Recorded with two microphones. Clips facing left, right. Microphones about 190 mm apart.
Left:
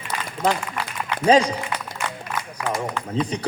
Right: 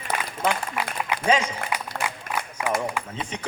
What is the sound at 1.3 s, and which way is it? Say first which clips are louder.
Speech: left 7 dB; 35° left (ahead or behind).